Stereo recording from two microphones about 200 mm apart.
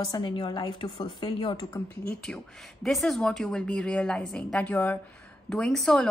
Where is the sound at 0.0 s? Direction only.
20° left (ahead or behind).